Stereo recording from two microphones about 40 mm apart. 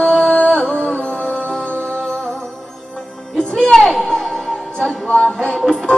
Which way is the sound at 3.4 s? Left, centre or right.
Centre.